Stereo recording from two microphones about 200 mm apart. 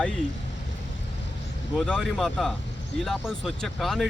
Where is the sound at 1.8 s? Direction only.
Centre (ahead or behind).